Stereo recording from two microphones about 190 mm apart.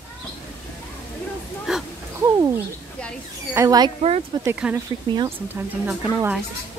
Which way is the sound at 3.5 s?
20° right (ahead or behind).